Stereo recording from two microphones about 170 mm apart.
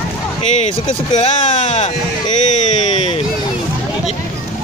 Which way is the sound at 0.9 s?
45° left (ahead or behind).